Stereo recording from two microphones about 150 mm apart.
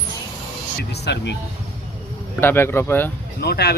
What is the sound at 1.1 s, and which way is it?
Speech, 90° left.